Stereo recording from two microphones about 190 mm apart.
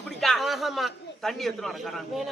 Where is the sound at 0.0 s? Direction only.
Centre (ahead or behind).